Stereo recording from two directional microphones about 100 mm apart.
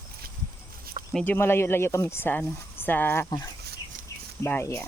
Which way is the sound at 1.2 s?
20° left (ahead or behind).